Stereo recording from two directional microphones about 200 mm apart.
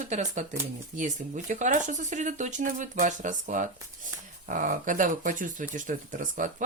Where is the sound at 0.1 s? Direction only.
35° right (ahead or behind).